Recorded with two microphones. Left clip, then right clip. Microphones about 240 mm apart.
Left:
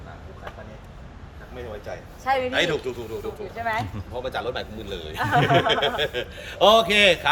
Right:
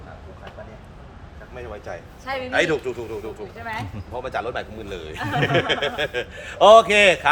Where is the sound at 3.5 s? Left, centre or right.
Centre.